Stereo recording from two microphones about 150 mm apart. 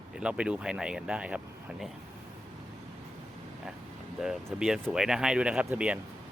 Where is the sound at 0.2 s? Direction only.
5° right (ahead or behind).